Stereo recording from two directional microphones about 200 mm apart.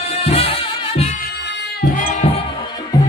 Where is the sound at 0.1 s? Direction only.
30° left (ahead or behind).